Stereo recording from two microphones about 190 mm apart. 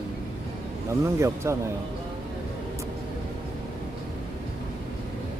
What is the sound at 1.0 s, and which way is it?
Speech, 15° right (ahead or behind).